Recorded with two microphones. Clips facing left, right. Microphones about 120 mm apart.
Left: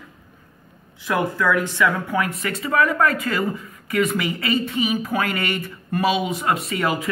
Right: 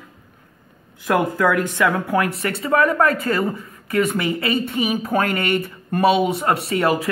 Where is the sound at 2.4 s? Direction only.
45° right (ahead or behind).